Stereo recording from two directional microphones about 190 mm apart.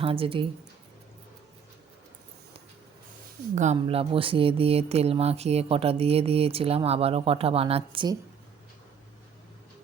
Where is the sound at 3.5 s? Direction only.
40° right (ahead or behind).